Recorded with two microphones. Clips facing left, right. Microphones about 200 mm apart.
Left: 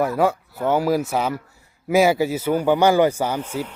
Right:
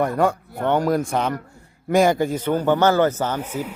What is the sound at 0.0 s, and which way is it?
A man's voice, 5° left (ahead or behind).